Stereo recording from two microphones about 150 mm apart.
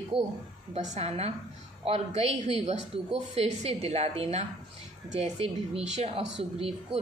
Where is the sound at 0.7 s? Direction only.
50° right (ahead or behind).